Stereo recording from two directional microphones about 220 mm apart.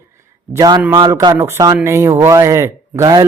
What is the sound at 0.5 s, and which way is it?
Speech, 15° right (ahead or behind).